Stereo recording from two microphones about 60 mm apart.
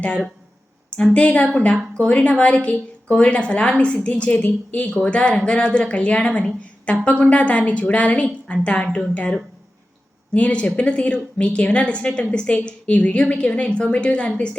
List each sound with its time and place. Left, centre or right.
1.1 s a woman's voice: centre